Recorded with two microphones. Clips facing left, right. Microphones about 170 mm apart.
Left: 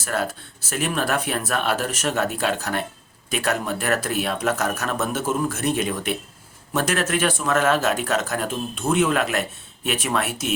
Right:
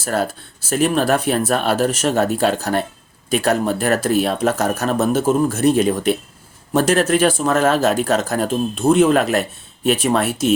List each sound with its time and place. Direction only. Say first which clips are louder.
0.0 s speech: right 5 dB; 35° right (ahead or behind)